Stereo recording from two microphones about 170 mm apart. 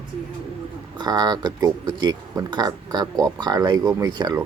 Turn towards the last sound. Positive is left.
turn(degrees=-20)  # may be behind; listen again after turning